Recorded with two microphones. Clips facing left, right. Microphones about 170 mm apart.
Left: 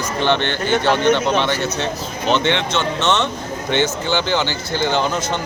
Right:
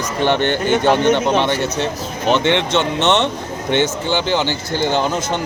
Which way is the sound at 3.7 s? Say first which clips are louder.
Right 2 dB; 55° right (ahead or behind).